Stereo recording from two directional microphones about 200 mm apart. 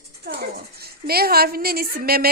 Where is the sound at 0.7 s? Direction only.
50° right (ahead or behind).